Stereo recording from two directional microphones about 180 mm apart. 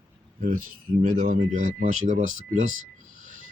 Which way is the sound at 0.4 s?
50° right (ahead or behind).